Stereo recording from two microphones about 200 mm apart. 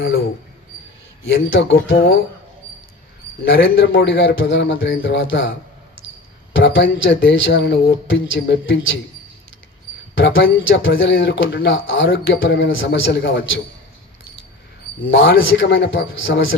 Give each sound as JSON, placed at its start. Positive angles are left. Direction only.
{"t": 1.2, "sound": "speech", "side_deg": 65}
{"t": 3.4, "sound": "speech", "side_deg": 65}
{"t": 10.2, "sound": "speech", "side_deg": 65}
{"t": 15.1, "sound": "speech", "side_deg": 65}